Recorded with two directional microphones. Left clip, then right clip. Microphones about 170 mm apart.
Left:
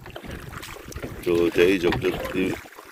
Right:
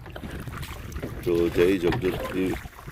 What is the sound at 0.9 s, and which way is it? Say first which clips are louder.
Speech: left 2 dB; centre (ahead or behind).